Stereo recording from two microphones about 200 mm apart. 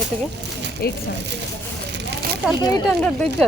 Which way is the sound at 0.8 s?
50° left (ahead or behind).